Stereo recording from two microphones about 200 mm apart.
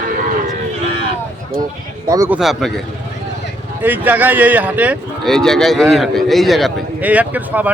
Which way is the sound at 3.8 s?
10° right (ahead or behind).